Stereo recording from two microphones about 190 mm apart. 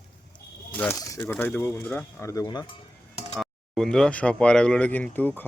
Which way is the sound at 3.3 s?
Centre (ahead or behind).